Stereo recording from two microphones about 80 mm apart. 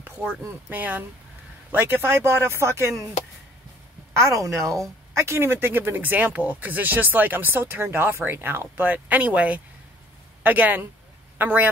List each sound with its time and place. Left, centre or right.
0.4 s speech: right
4.2 s speech: right